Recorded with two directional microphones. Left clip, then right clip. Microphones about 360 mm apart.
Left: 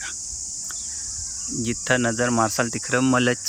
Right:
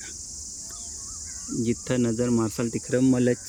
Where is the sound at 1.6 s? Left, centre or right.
Centre.